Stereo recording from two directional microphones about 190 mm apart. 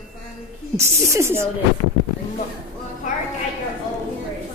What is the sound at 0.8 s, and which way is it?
Speech, 15° right (ahead or behind).